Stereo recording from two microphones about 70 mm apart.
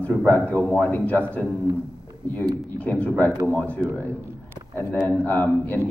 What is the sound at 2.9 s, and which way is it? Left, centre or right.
Speech, left.